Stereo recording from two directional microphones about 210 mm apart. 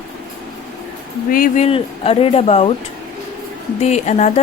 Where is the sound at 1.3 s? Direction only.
40° left (ahead or behind).